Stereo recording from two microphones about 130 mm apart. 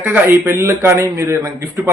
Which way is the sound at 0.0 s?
15° right (ahead or behind).